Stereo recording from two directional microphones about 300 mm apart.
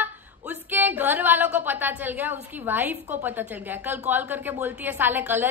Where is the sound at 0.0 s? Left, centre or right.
Centre.